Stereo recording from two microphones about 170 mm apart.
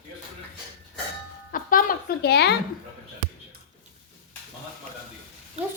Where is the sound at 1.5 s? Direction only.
55° left (ahead or behind); by 2.6 s 75° left (ahead or behind).